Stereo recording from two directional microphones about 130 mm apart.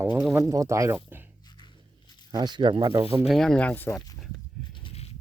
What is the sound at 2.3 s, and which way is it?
Speech, 35° right (ahead or behind).